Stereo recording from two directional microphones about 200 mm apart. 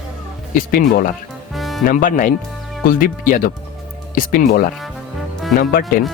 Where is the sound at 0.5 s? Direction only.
45° left (ahead or behind).